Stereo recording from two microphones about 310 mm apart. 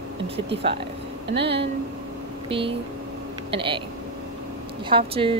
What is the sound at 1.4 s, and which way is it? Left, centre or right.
Speech, centre.